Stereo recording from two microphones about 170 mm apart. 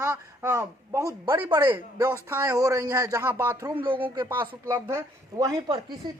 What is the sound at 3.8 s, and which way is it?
Speech, 30° right (ahead or behind).